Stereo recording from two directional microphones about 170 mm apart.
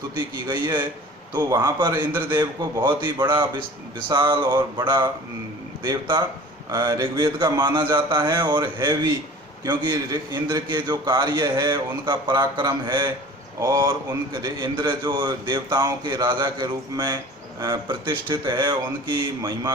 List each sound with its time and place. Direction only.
0.2 s a man's voice: 25° right (ahead or behind)